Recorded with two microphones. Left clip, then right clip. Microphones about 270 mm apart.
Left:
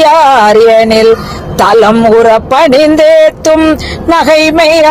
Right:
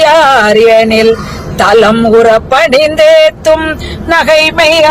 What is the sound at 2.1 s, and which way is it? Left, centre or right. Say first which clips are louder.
A man's voice: even; centre.